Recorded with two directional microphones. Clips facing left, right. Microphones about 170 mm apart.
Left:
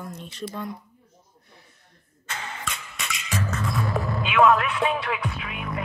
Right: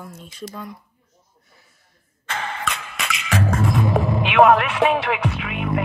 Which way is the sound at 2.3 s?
85° right.